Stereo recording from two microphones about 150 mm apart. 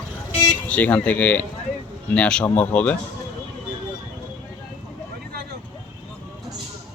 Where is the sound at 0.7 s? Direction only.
10° left (ahead or behind).